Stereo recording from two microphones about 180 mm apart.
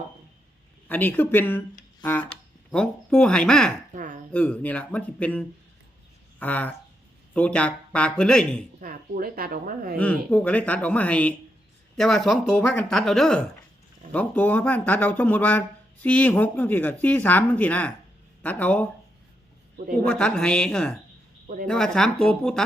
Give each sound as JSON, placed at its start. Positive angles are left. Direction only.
{"t": 0.9, "sound": "speech", "side_deg": 10}
{"t": 2.7, "sound": "speech", "side_deg": 5}
{"t": 3.9, "sound": "a woman's voice", "side_deg": -50}
{"t": 4.3, "sound": "speech", "side_deg": 10}
{"t": 8.8, "sound": "a woman's voice", "side_deg": -50}
{"t": 10.0, "sound": "speech", "side_deg": 10}
{"t": 20.1, "sound": "speech", "side_deg": 5}
{"t": 21.4, "sound": "speech", "side_deg": -50}
{"t": 21.7, "sound": "speech", "side_deg": 5}